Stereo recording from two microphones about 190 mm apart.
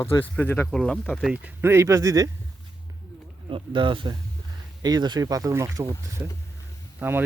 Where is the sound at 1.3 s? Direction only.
10° right (ahead or behind).